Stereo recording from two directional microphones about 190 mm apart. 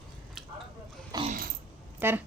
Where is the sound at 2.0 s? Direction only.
10° right (ahead or behind).